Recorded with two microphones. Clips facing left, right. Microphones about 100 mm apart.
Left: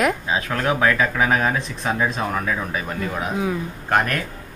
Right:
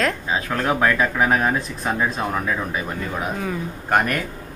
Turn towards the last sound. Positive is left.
turn(degrees=-10)  # may be behind; listen again after turning